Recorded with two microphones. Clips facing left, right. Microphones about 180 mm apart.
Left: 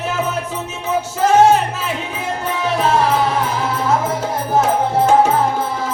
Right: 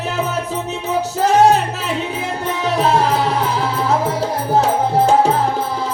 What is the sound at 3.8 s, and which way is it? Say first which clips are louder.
Music: even; 35° right (ahead or behind).